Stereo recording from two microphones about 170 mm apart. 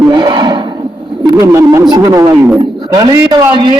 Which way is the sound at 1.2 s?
20° right (ahead or behind).